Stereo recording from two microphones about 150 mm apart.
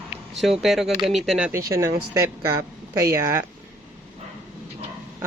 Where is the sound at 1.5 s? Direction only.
20° right (ahead or behind).